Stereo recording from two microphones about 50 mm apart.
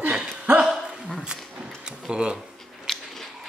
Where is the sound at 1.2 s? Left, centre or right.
Centre.